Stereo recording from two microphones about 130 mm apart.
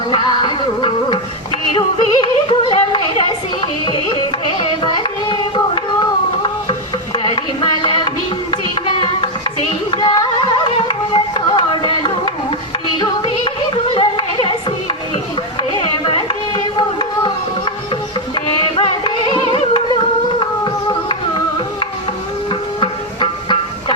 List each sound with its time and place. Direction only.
0.1 s music: 40° left (ahead or behind)
1.7 s yodeling: 40° left (ahead or behind)
4.8 s a sound: 35° left (ahead or behind)
7.3 s music: 40° left (ahead or behind)
9.6 s music: 40° left (ahead or behind)
15.8 s a sound: 45° left (ahead or behind)
18.8 s music: 40° left (ahead or behind)
21.1 s music: 40° left (ahead or behind)